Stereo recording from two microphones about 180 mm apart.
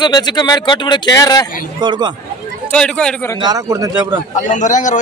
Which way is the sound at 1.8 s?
25° right (ahead or behind).